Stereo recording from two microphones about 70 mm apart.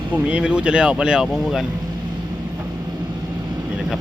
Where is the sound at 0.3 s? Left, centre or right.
Centre.